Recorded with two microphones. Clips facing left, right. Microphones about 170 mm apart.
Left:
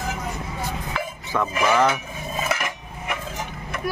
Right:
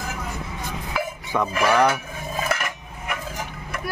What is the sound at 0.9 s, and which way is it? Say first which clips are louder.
Music: right 3 dB; 15° right (ahead or behind).